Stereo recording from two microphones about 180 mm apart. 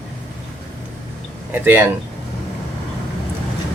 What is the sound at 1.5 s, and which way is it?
Speech, 10° right (ahead or behind).